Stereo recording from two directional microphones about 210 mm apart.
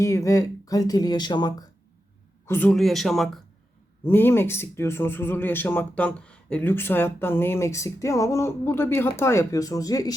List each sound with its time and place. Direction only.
0.0 s speech: 15° left (ahead or behind)
2.5 s speech: 5° left (ahead or behind)